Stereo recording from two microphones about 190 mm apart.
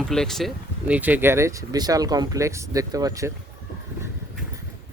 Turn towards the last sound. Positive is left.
turn(degrees=-15)  # may be behind; listen again after turning